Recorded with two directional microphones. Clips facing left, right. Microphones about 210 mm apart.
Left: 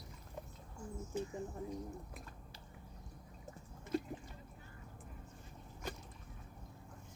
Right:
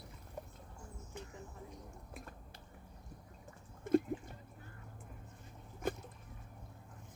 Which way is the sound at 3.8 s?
50° right (ahead or behind).